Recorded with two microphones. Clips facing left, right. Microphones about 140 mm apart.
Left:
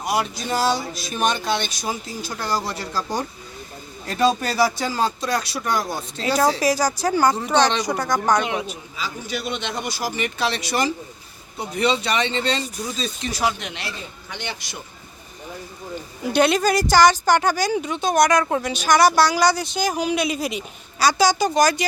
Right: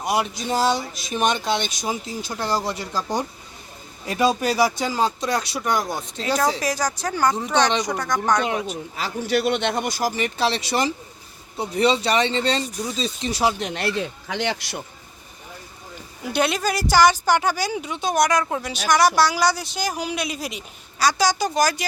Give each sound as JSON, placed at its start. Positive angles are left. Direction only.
{"t": 0.0, "sound": "speech", "side_deg": -20}
{"t": 6.2, "sound": "speech", "side_deg": 5}
{"t": 9.0, "sound": "speech", "side_deg": -65}
{"t": 12.6, "sound": "a woman's voice", "side_deg": 0}
{"t": 13.0, "sound": "speech", "side_deg": -25}
{"t": 13.7, "sound": "speech", "side_deg": -65}
{"t": 16.3, "sound": "a woman's voice", "side_deg": 0}